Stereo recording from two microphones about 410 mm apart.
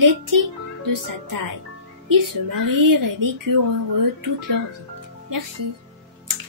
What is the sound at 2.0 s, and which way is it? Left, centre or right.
Speech, right.